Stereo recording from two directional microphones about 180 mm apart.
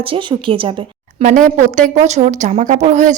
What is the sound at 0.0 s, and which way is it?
A woman's voice, 30° right (ahead or behind).